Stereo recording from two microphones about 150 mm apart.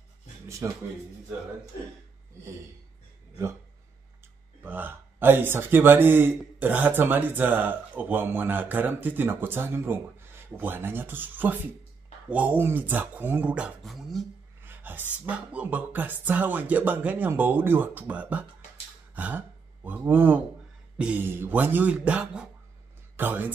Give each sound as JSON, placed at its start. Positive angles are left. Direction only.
{"t": 0.6, "sound": "speech", "side_deg": -20}
{"t": 4.6, "sound": "speech", "side_deg": -15}
{"t": 14.6, "sound": "a sound", "side_deg": -15}
{"t": 15.2, "sound": "speech", "side_deg": -10}
{"t": 19.1, "sound": "gasp", "side_deg": -10}
{"t": 21.0, "sound": "a man's voice", "side_deg": -10}